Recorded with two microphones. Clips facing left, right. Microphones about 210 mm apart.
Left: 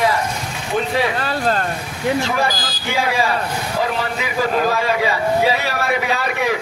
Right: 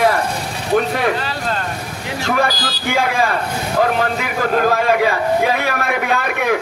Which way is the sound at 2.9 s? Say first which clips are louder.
Right 1 dB; 50° right (ahead or behind).